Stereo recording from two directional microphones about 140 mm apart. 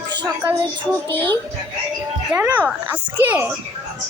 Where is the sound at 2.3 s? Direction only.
15° right (ahead or behind).